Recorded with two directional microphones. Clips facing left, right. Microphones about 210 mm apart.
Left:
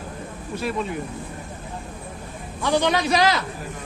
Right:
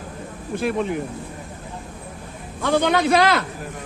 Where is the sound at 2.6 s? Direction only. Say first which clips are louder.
Right 2 dB; 55° right (ahead or behind).